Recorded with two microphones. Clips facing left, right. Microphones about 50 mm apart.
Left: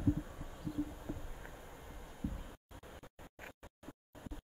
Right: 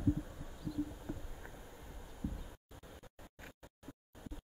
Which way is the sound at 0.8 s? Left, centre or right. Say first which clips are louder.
Even; centre.